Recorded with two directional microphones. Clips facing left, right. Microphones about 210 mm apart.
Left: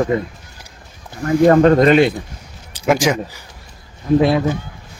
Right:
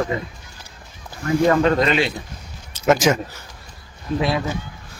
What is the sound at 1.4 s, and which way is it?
Speech, 50° left (ahead or behind).